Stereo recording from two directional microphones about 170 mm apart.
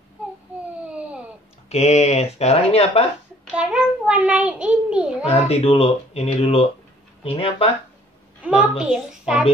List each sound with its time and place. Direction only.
0.8 s a sound: 5° right (ahead or behind)
1.7 s speech: 40° left (ahead or behind)
3.5 s a child's voice: 5° right (ahead or behind)
5.3 s speech: 35° left (ahead or behind)
8.4 s a child's voice: 5° right (ahead or behind)